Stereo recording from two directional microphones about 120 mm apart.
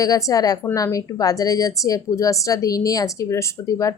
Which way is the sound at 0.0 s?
30° left (ahead or behind).